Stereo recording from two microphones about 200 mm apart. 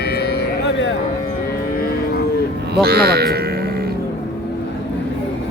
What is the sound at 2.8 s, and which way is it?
Music, 50° right (ahead or behind).